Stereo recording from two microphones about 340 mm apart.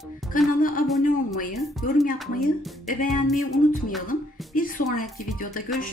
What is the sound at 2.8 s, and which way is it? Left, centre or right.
Speech, left.